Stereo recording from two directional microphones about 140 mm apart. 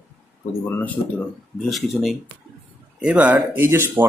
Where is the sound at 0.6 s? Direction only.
15° left (ahead or behind).